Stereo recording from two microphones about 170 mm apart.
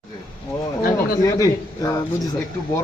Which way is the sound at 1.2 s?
20° left (ahead or behind).